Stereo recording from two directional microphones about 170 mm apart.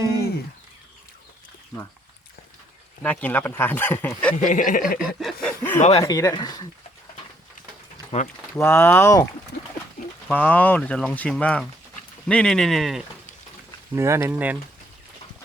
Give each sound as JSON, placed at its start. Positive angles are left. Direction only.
{"t": 3.0, "sound": "speech", "side_deg": 10}
{"t": 4.4, "sound": "speech", "side_deg": 50}
{"t": 4.9, "sound": "speech", "side_deg": 0}
{"t": 5.8, "sound": "speech", "side_deg": 35}
{"t": 6.1, "sound": "speech", "side_deg": 20}
{"t": 8.1, "sound": "speech", "side_deg": 40}
{"t": 8.5, "sound": "speech", "side_deg": 15}
{"t": 13.9, "sound": "speech", "side_deg": -15}